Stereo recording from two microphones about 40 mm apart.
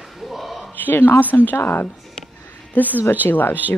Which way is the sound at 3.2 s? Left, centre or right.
Left.